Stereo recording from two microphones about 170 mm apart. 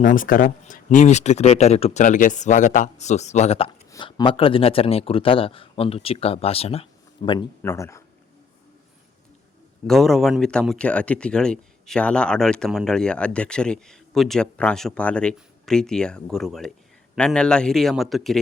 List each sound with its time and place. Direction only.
0.0 s speech: 50° left (ahead or behind)
3.9 s speech: 25° left (ahead or behind)
7.6 s speech: 15° left (ahead or behind)
9.8 s speech: centre (ahead or behind)